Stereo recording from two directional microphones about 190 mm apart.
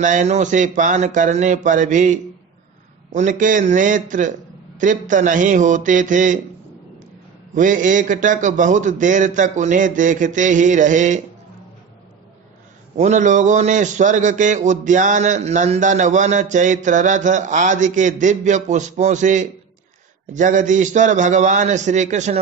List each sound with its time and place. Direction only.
0.0 s a man's voice: 40° right (ahead or behind)
7.5 s a man's voice: 40° right (ahead or behind)
12.9 s a man's voice: 40° right (ahead or behind)